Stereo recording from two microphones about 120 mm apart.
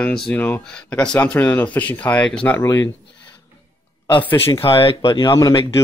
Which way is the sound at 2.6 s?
25° left (ahead or behind).